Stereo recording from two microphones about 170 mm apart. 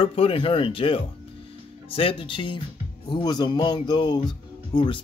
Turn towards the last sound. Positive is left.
turn(degrees=25)  # may be behind; listen again after turning